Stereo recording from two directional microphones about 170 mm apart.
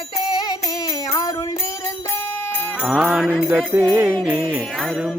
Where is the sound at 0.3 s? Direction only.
25° left (ahead or behind).